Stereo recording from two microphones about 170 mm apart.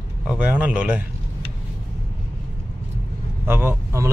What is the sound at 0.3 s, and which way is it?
Speech, 5° right (ahead or behind).